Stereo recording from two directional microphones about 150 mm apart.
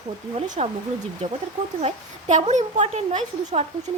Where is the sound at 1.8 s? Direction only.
45° right (ahead or behind).